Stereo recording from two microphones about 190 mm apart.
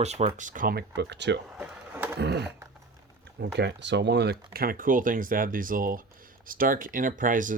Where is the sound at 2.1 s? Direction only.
60° right (ahead or behind).